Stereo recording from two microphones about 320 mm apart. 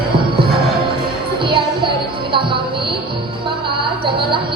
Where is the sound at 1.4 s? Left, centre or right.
Centre.